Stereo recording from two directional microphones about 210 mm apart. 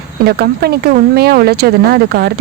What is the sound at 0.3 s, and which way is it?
Speech, 50° right (ahead or behind).